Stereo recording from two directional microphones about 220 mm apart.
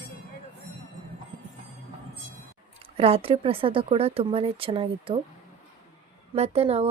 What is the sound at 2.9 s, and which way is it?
Speech, 25° right (ahead or behind).